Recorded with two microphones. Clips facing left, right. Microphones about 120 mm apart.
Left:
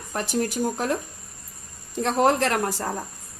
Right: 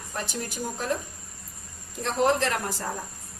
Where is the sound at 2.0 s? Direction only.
50° left (ahead or behind).